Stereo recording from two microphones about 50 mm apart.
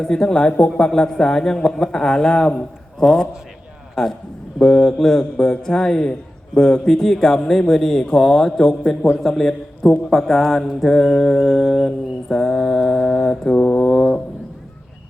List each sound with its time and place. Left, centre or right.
0.0 s a man's voice: centre
13.0 s a man's voice: centre